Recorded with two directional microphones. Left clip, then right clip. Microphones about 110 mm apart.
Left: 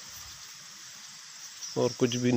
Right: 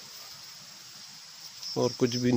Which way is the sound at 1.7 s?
15° right (ahead or behind).